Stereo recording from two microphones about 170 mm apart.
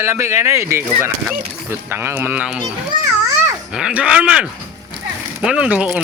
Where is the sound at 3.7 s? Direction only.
5° right (ahead or behind).